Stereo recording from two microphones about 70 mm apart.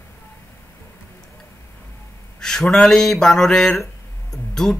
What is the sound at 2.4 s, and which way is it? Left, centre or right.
Speech, centre.